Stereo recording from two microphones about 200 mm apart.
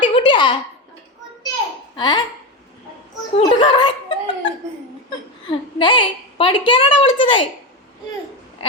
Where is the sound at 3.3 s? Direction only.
25° left (ahead or behind).